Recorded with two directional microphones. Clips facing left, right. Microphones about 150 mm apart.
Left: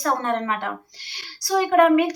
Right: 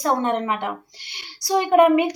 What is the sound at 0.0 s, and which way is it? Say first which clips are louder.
A woman's voice: right 2 dB; 20° right (ahead or behind).